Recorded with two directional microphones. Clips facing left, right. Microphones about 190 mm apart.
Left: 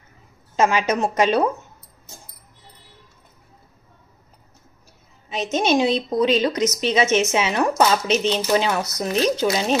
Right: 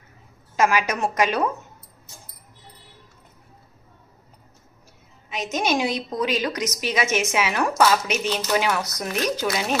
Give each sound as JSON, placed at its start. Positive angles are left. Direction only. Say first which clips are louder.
{"t": 0.6, "sound": "a woman's voice", "louder": "left 2 dB", "side_deg": 25}
{"t": 5.3, "sound": "a woman's voice", "louder": "left 4 dB", "side_deg": 30}